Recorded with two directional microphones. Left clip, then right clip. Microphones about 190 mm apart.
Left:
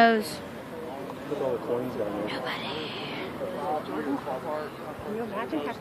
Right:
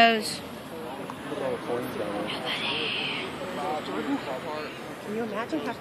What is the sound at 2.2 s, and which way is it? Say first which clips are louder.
Speech: right 2 dB; 30° left (ahead or behind).